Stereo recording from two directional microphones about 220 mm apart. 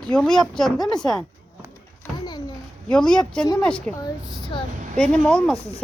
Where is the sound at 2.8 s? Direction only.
5° left (ahead or behind).